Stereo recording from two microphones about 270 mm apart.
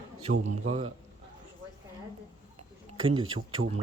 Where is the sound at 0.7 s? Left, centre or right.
Right.